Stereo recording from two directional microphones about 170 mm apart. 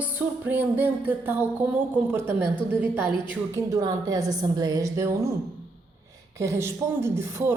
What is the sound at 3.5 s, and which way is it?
Speech, 20° right (ahead or behind).